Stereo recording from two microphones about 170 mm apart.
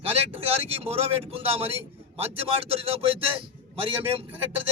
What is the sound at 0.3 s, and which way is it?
A man's voice, 35° right (ahead or behind).